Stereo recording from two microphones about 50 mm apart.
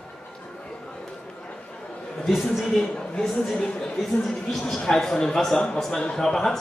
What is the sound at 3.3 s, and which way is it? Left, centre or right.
Speech, centre.